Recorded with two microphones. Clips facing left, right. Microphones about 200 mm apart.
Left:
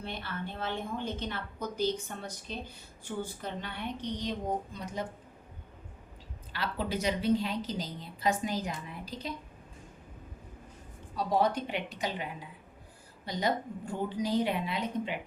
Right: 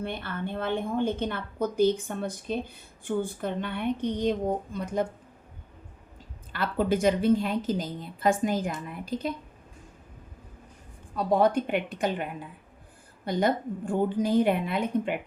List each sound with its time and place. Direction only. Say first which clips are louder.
0.0 s a woman's voice: right 6 dB; 55° right (ahead or behind)
6.5 s a woman's voice: right 8 dB; 50° right (ahead or behind)
11.1 s a woman's voice: right 5 dB; 55° right (ahead or behind)